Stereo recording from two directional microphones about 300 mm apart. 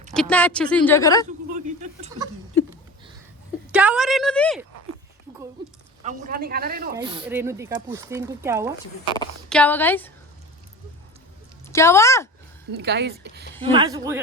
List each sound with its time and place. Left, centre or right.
0.1 s a woman's voice: centre
1.6 s a sound: right
3.7 s a woman's voice: centre
6.0 s a man's voice: right
6.9 s speech: centre
9.0 s a woman's voice: centre
11.7 s speech: centre
12.7 s speech: right
13.7 s speech: centre